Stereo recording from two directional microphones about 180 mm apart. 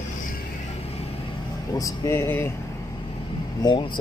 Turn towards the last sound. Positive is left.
turn(degrees=25)  # may be behind; listen again after turning